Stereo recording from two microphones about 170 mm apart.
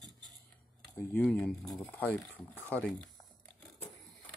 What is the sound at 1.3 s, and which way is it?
Speech, 5° left (ahead or behind).